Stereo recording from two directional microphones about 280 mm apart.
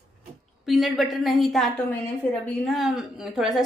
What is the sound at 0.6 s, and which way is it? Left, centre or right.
A woman's voice, centre.